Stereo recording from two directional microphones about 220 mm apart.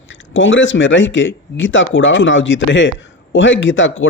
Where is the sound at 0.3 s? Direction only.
60° left (ahead or behind).